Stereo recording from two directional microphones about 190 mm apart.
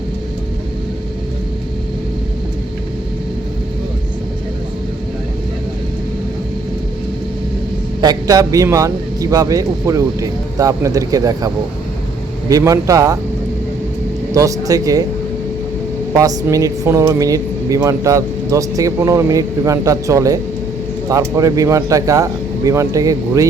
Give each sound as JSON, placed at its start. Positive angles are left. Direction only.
{"t": 8.0, "sound": "speech", "side_deg": -20}
{"t": 14.3, "sound": "speech", "side_deg": -20}
{"t": 16.1, "sound": "speech", "side_deg": -20}